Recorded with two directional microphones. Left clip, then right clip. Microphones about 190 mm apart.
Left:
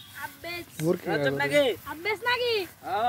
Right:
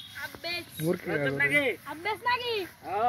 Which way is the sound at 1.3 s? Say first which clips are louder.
Left 2 dB; 50° left (ahead or behind).